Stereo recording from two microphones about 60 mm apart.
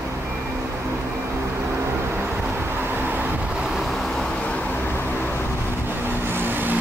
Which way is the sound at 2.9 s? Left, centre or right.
Right.